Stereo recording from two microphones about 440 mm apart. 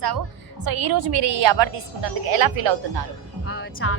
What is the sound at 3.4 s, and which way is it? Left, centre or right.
Music, left.